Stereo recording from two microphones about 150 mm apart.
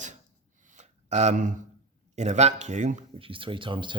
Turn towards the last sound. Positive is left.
turn(degrees=-35)  # may be behind; listen again after turning